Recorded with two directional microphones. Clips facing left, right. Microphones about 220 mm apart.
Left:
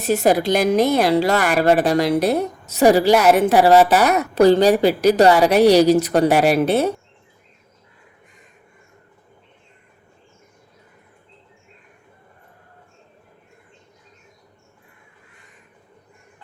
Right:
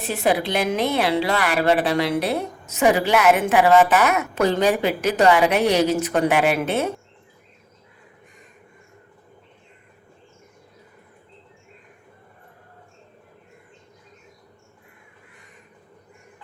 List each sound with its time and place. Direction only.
0.0 s a woman's voice: 45° left (ahead or behind)